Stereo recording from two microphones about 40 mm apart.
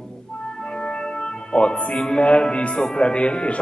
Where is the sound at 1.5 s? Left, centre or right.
Left.